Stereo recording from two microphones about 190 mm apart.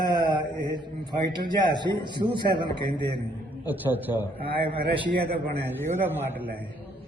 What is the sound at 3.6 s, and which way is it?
Speech, 10° right (ahead or behind).